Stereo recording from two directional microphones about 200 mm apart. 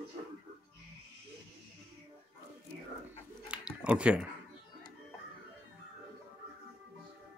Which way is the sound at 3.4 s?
5° right (ahead or behind).